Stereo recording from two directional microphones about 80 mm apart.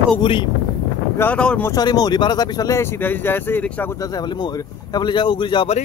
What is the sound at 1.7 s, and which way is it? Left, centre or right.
Speech, left.